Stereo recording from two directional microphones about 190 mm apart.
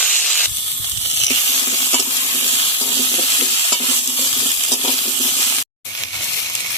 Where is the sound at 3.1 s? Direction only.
25° left (ahead or behind).